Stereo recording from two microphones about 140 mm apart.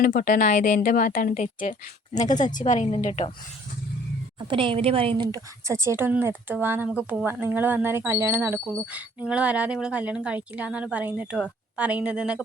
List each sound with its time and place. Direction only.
0.0 s a woman's voice: 80° left
2.1 s a woman's voice: 60° left (ahead or behind)
4.4 s a woman's voice: 35° right (ahead or behind); by 12.4 s 5° right (ahead or behind)